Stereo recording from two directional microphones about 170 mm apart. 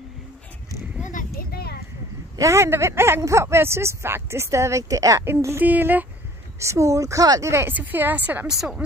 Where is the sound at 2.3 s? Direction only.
15° right (ahead or behind).